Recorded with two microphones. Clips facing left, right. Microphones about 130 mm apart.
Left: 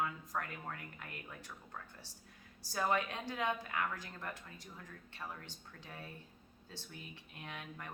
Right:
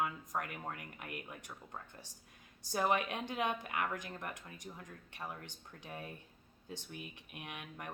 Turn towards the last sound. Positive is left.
turn(degrees=-15)  # may be behind; listen again after turning